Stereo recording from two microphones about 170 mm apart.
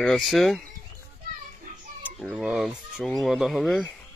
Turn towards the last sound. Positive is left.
turn(degrees=5)  # may be behind; listen again after turning